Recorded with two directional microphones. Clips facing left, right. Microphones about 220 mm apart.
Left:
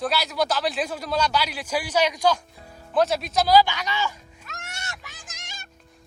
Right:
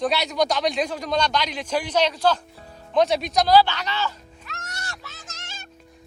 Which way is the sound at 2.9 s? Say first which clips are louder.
Right 2 dB; centre (ahead or behind).